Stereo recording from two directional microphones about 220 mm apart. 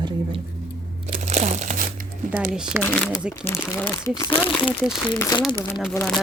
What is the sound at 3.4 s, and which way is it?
A woman's voice, 10° left (ahead or behind).